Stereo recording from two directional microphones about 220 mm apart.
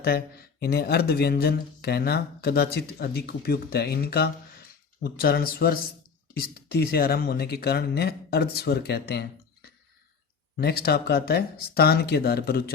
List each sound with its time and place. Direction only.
0.6 s speech: 45° left (ahead or behind)
10.6 s speech: 45° left (ahead or behind)